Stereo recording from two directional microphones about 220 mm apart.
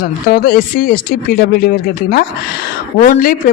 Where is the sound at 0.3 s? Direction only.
45° left (ahead or behind).